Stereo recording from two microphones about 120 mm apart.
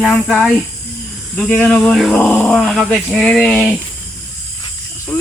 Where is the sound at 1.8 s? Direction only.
Centre (ahead or behind).